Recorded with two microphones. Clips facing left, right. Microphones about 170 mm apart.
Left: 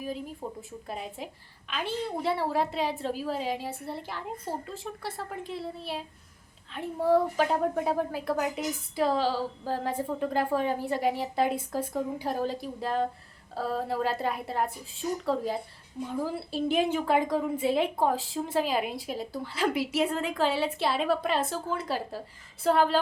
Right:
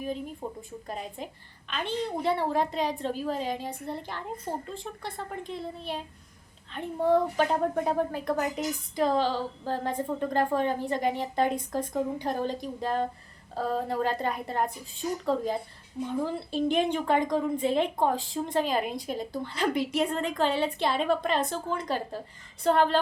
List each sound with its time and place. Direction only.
0.4 s speech: 15° right (ahead or behind)
0.9 s a woman's voice: 5° left (ahead or behind)